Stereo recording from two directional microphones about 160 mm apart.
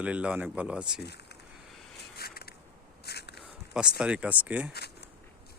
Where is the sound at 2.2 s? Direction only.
75° left (ahead or behind).